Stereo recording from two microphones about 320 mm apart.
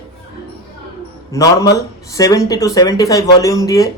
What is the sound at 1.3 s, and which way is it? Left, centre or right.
Speech, centre.